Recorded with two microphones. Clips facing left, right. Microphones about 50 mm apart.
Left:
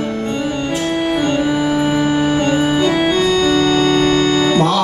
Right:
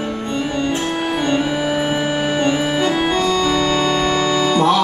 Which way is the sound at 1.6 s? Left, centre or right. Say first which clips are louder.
Left 3 dB; right.